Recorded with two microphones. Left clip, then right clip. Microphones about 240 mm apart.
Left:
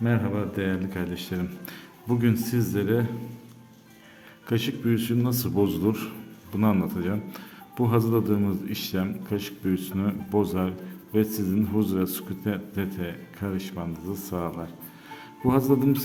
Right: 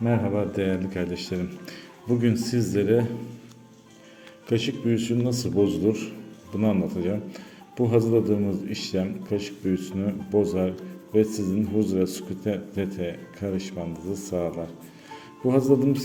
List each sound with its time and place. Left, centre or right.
0.0 s speech: centre
4.4 s speech: centre